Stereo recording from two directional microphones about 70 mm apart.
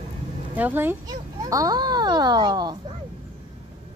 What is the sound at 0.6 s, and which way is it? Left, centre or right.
Speech, right.